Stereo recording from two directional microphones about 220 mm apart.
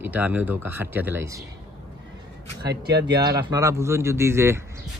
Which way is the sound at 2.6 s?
45° right (ahead or behind).